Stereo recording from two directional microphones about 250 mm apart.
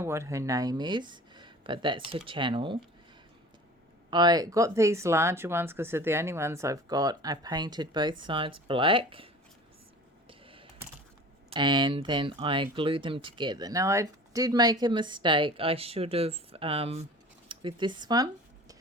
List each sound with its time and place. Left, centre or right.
0.0 s speech: centre
4.1 s speech: centre
10.2 s a sound: right
11.5 s speech: centre